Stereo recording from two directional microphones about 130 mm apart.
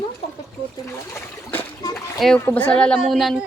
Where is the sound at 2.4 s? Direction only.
15° left (ahead or behind).